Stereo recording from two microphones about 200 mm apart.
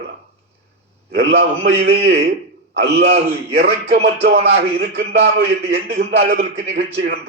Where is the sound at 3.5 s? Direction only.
55° right (ahead or behind).